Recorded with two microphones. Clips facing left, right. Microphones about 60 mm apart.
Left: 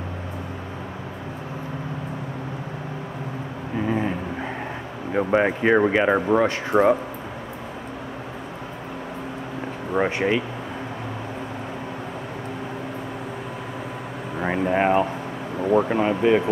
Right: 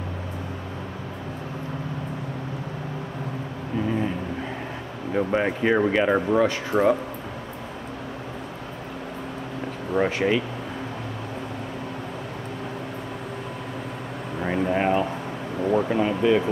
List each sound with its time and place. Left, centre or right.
3.7 s vehicle: centre
5.1 s speech: centre
9.9 s speech: centre
14.4 s speech: centre